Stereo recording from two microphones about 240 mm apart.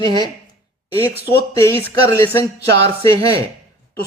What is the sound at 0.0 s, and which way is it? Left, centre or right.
Speech, centre.